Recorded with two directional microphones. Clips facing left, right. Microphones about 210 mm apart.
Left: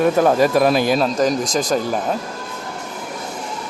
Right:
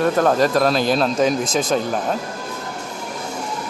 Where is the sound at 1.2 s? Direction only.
5° right (ahead or behind).